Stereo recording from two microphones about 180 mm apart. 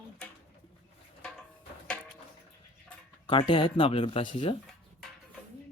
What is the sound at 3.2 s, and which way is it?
Speech, 30° left (ahead or behind).